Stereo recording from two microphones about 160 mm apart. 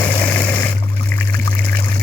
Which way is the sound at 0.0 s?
10° left (ahead or behind).